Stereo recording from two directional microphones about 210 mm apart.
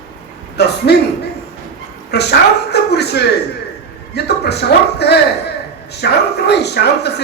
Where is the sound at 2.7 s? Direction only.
50° left (ahead or behind).